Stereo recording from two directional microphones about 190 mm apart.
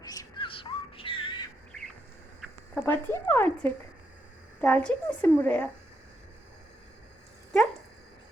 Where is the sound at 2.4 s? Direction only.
10° left (ahead or behind).